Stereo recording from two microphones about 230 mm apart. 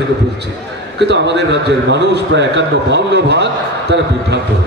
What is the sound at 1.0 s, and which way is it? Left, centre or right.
A man's voice, right.